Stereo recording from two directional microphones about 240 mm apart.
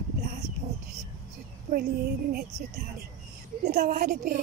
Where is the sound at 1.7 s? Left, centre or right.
Right.